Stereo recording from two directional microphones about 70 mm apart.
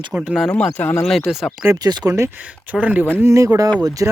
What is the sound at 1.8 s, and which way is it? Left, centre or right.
Speech, right.